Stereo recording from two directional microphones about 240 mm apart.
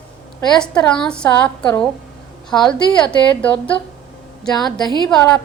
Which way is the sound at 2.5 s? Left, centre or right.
Centre.